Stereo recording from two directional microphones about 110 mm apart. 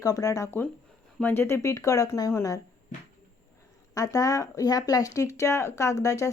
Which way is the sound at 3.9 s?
30° left (ahead or behind).